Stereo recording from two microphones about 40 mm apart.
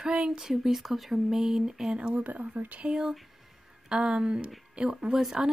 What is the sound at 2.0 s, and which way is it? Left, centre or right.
Speech, right.